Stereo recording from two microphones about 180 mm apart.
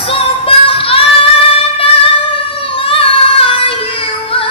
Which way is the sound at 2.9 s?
30° left (ahead or behind).